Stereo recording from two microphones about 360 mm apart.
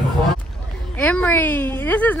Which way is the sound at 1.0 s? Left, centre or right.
Centre.